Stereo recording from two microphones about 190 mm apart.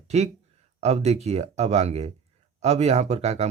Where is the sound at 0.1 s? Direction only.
35° right (ahead or behind).